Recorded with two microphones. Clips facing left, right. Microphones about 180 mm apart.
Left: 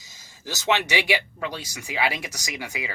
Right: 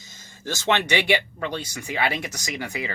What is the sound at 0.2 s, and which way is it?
Speech, 5° left (ahead or behind).